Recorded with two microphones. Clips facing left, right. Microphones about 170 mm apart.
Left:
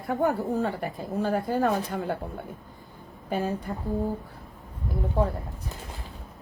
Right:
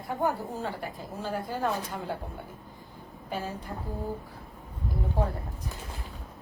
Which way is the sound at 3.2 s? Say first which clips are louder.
Left 6 dB; 50° left (ahead or behind).